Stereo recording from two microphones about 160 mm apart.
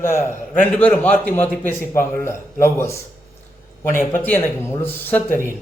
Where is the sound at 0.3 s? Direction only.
10° left (ahead or behind).